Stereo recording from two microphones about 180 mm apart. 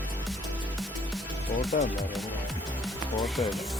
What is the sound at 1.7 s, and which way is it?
Speech, 50° left (ahead or behind).